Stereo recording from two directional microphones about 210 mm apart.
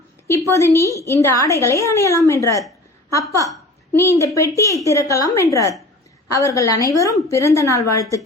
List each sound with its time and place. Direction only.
0.5 s a woman's voice: 15° left (ahead or behind)